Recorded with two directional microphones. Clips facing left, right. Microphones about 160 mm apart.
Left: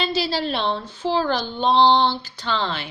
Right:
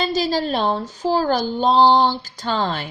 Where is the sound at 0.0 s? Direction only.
45° right (ahead or behind).